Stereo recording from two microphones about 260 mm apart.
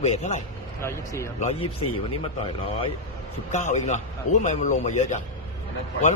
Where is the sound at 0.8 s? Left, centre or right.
Centre.